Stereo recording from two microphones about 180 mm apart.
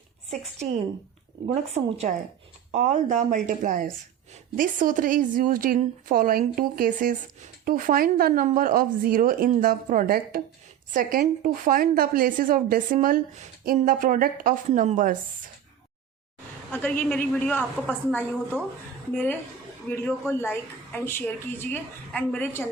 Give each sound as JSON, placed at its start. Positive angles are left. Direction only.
{"t": 1.5, "sound": "a woman's voice", "side_deg": -40}
{"t": 16.7, "sound": "speech", "side_deg": 10}